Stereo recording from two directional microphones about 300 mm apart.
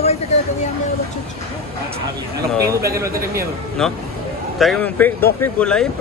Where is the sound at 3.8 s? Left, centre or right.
Centre.